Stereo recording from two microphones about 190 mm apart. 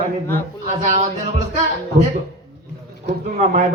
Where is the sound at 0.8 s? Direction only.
40° right (ahead or behind).